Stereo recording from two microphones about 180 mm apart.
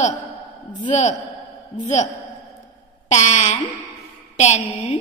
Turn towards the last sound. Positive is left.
turn(degrees=40)  # may be behind; listen again after turning